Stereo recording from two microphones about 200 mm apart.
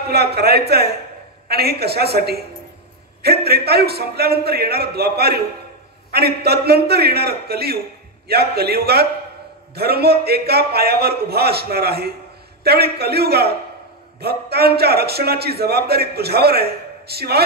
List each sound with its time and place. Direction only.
0.1 s a man's voice: 50° right (ahead or behind)